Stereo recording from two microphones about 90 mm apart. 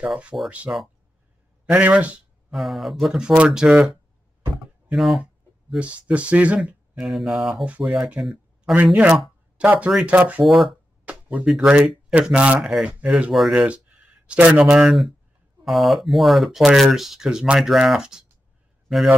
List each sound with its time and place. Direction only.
0.0 s speech: 15° right (ahead or behind)
2.5 s speech: centre (ahead or behind)
5.8 s speech: 15° right (ahead or behind)
7.1 s speech: centre (ahead or behind)
8.2 s a sound: centre (ahead or behind)
8.9 s speech: 15° right (ahead or behind)
10.4 s speech: centre (ahead or behind)
11.1 s a sound: 15° right (ahead or behind)
11.4 s a man's voice: 10° right (ahead or behind)